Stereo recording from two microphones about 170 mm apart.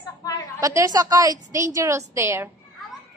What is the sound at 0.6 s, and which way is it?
A woman's voice, 20° right (ahead or behind).